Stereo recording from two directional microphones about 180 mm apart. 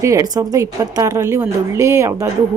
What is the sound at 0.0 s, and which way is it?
A woman's voice, 15° right (ahead or behind).